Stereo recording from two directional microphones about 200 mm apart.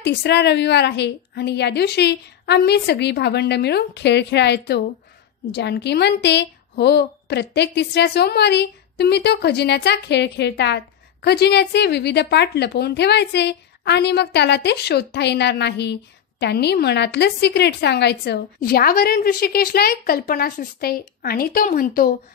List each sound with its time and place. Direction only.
0.0 s a woman's voice: 55° left (ahead or behind)